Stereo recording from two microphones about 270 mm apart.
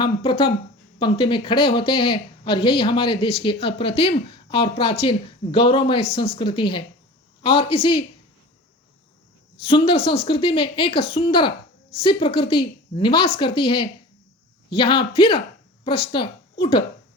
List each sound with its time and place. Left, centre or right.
0.0 s speech: centre
9.6 s a woman's voice: left